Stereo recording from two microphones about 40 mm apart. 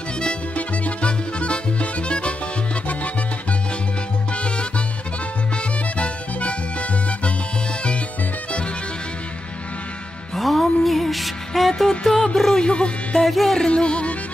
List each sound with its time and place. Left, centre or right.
0.6 s music: left
4.3 s salsa music: left
5.6 s music: left
10.3 s music: centre
12.0 s music: centre
12.6 s music: left
13.2 s music: centre
13.7 s music: left